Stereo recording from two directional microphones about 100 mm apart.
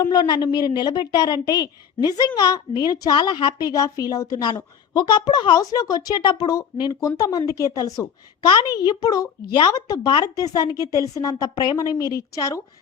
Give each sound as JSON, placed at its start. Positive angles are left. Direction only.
{"t": 0.1, "sound": "a woman's voice", "side_deg": 45}
{"t": 3.7, "sound": "a woman's voice", "side_deg": 35}